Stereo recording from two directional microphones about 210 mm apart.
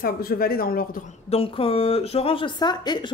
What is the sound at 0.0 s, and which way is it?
Speech, 45° left (ahead or behind).